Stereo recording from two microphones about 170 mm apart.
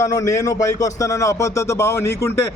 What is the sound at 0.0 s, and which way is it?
Speech, 20° left (ahead or behind).